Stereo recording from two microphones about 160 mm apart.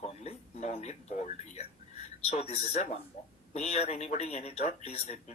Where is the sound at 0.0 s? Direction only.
40° left (ahead or behind).